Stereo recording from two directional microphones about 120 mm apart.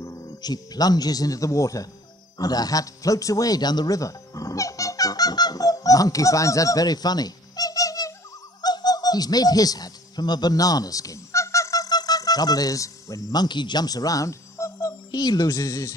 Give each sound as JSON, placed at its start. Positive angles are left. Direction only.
{"t": 0.0, "sound": "speech", "side_deg": 30}
{"t": 2.3, "sound": "a sound", "side_deg": 30}
{"t": 8.5, "sound": "speech", "side_deg": 35}